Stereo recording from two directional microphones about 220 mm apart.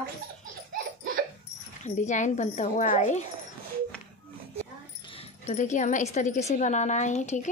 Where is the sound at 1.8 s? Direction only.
35° left (ahead or behind).